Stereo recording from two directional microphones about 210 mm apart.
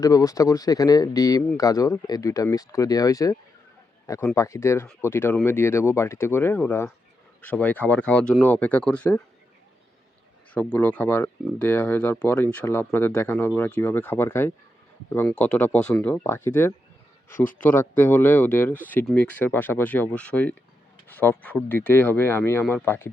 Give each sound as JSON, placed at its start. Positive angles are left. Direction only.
{"t": 0.0, "sound": "speech", "side_deg": 15}
{"t": 10.5, "sound": "speech", "side_deg": 10}